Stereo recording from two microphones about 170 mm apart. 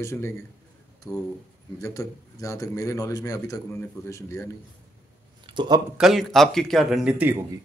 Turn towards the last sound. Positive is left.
turn(degrees=-10)  # may be behind; listen again after turning